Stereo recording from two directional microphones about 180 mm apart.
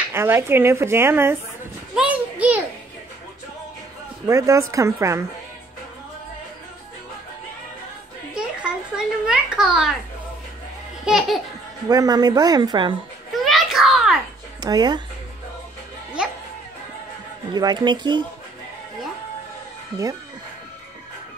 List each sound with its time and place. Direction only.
0.1 s speech: 15° right (ahead or behind)
2.0 s a sound: 10° right (ahead or behind)
4.3 s speech: 20° right (ahead or behind)
8.4 s a sound: 5° right (ahead or behind)
11.1 s laughter: centre (ahead or behind)
11.9 s a woman's voice: 20° right (ahead or behind)
13.3 s a sound: centre (ahead or behind)
14.6 s speech: 20° right (ahead or behind)
16.2 s music: 5° right (ahead or behind)
17.6 s a woman's voice: 25° right (ahead or behind)